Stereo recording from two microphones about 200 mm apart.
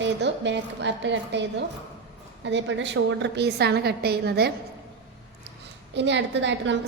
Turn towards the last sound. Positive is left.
turn(degrees=-65)  # may be behind; listen again after turning